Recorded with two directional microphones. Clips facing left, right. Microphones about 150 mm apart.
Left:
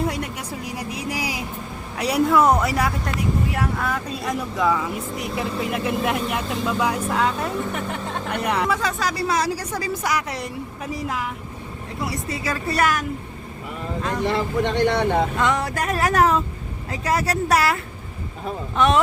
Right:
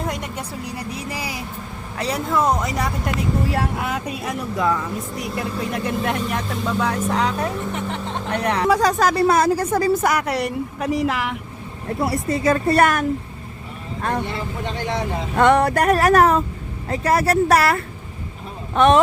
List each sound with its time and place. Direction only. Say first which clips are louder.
0.8 s vehicle: left 3 dB; 15° left (ahead or behind)
2.0 s speech: left 3 dB; 10° left (ahead or behind)
3.8 s speech: right 1 dB; 20° right (ahead or behind)
4.2 s speech: left 1 dB; centre (ahead or behind)
8.6 s speech: right 6 dB; 40° right (ahead or behind); by 11.3 s 75° right (ahead or behind)
11.9 s speech: right 6 dB; 55° right (ahead or behind)
14.3 s speech: left 6 dB; 75° left (ahead or behind)
15.4 s music: right 7 dB; 60° right (ahead or behind)
18.7 s speech: right 5 dB; 50° right (ahead or behind)